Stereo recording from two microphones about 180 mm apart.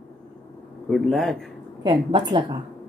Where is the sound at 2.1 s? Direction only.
25° right (ahead or behind).